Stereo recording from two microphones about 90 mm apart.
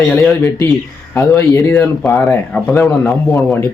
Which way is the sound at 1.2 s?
40° left (ahead or behind).